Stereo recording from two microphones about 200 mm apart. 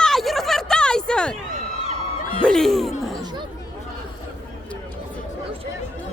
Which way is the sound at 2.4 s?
Centre (ahead or behind).